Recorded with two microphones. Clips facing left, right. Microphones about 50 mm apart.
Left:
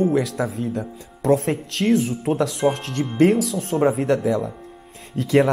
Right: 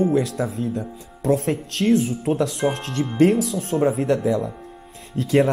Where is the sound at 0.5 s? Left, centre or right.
Left.